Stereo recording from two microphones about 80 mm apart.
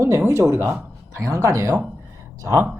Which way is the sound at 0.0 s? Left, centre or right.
Right.